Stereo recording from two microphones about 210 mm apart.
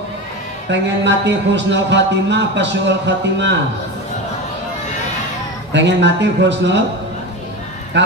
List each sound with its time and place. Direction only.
0.7 s a man's voice: 55° right (ahead or behind)
5.7 s a man's voice: 55° right (ahead or behind)